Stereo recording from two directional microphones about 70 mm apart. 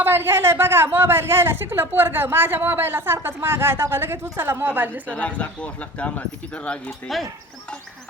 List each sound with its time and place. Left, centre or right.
0.0 s a woman's voice: right
5.0 s speech: centre